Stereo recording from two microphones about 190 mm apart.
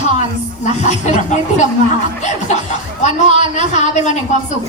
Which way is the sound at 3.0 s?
40° left (ahead or behind).